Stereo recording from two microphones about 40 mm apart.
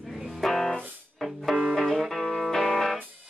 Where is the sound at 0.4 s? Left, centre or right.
Centre.